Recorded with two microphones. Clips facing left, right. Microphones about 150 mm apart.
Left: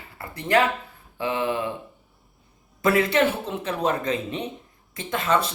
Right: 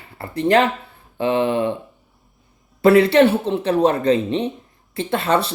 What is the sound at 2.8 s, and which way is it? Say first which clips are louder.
Speech: right 8 dB; 30° right (ahead or behind).